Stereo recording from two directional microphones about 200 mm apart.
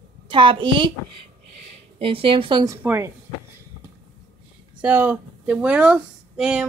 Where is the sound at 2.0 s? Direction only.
25° right (ahead or behind).